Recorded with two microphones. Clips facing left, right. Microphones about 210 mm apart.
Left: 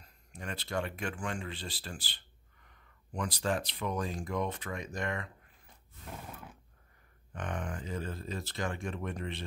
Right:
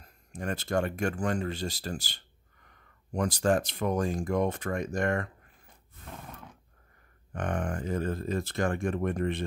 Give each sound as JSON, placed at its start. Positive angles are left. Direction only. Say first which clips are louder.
{"t": 0.0, "sound": "speech", "louder": "right 8 dB", "side_deg": -45}
{"t": 6.1, "sound": "a sound", "louder": "right 1 dB", "side_deg": 5}
{"t": 7.3, "sound": "speech", "louder": "right 6 dB", "side_deg": -50}